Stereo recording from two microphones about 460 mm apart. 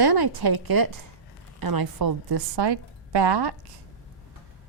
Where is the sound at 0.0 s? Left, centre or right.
Right.